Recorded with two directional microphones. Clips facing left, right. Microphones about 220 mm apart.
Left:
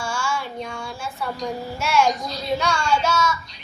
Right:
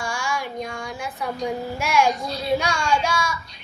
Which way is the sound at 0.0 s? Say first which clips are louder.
Left 1 dB; 15° right (ahead or behind).